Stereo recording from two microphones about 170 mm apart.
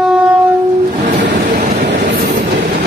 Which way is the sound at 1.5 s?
50° right (ahead or behind).